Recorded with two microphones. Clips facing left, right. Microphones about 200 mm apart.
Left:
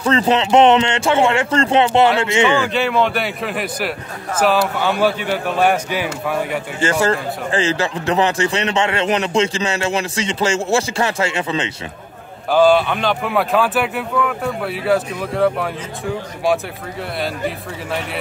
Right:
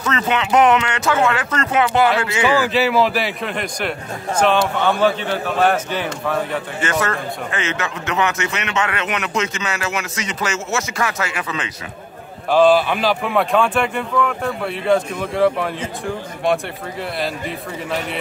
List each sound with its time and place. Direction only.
0.0 s a man's voice: 30° left (ahead or behind)
2.6 s a man's voice: 5° right (ahead or behind)
6.8 s a man's voice: 30° left (ahead or behind)
12.4 s speech: centre (ahead or behind)